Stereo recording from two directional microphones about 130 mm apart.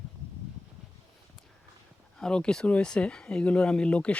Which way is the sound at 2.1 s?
5° left (ahead or behind).